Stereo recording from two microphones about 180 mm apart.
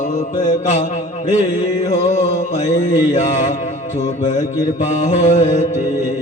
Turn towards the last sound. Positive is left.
turn(degrees=40)  # may be behind; listen again after turning